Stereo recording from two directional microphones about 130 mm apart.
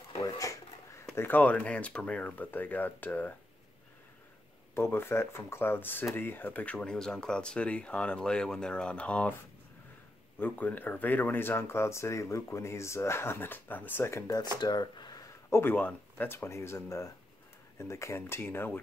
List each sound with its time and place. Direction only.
0.2 s a sound: 25° left (ahead or behind)
1.1 s speech: 15° left (ahead or behind)
4.7 s speech: 15° left (ahead or behind)
10.4 s speech: 10° left (ahead or behind)
14.6 s a sound: 35° left (ahead or behind)
15.6 s speech: 15° left (ahead or behind)